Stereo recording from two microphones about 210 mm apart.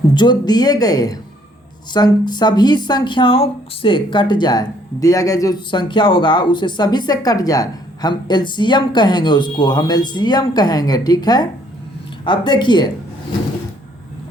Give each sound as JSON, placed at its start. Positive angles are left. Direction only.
{"t": 0.1, "sound": "speech", "side_deg": 20}